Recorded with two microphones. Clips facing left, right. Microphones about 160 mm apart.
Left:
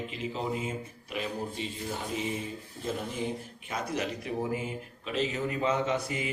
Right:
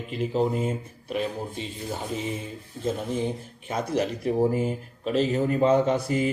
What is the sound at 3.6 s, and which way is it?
Speech, 35° right (ahead or behind).